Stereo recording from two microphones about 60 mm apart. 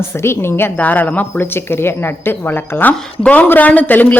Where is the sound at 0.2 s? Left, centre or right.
Left.